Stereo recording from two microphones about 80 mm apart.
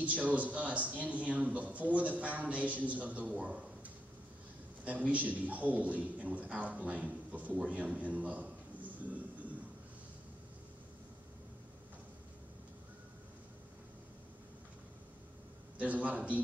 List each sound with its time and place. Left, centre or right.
0.0 s a man's voice: centre
15.8 s a man's voice: centre